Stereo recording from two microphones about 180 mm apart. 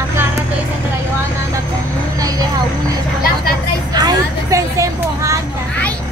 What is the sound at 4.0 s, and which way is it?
Vehicle, 20° right (ahead or behind).